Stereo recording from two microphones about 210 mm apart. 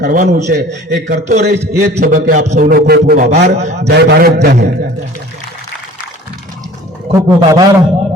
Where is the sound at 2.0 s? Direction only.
40° right (ahead or behind).